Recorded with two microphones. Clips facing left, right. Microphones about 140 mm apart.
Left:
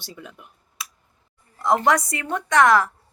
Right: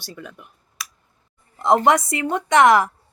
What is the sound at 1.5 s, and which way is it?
A woman's voice, 25° right (ahead or behind).